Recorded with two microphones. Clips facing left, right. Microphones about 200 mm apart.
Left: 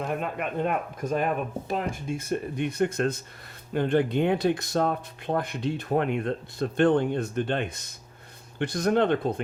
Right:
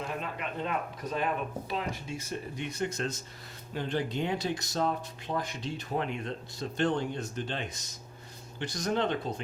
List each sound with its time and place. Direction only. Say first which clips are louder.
0.0 s speech: left 6 dB; 55° left (ahead or behind)